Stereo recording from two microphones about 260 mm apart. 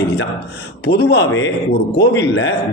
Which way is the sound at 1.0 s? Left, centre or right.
Left.